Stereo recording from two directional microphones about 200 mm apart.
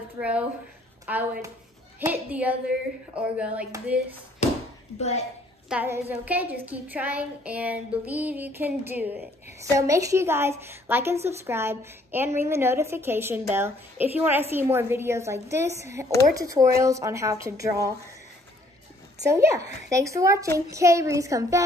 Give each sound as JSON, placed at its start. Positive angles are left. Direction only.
{"t": 0.2, "sound": "a woman's voice", "side_deg": -5}
{"t": 4.9, "sound": "speech", "side_deg": 30}
{"t": 5.7, "sound": "a woman's voice", "side_deg": -10}
{"t": 19.2, "sound": "a woman's voice", "side_deg": -15}